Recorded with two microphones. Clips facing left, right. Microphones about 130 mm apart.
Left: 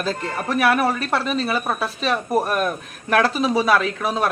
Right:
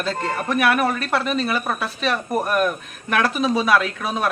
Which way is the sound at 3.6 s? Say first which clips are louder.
Left 1 dB; 35° left (ahead or behind).